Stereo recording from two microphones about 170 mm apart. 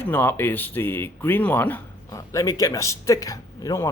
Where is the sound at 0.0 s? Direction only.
10° left (ahead or behind).